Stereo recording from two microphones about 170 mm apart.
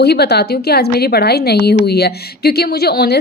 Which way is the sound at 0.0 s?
75° left (ahead or behind).